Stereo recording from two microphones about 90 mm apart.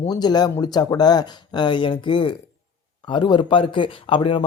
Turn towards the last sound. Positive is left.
turn(degrees=70)  # may be behind; listen again after turning